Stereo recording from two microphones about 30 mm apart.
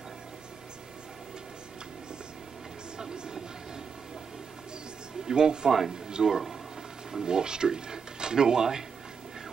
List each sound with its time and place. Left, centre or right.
3.0 s train: right
5.2 s speech: right
6.2 s speech: centre
7.1 s speech: right